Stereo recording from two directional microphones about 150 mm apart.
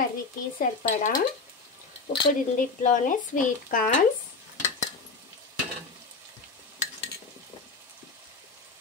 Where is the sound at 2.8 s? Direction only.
60° left (ahead or behind).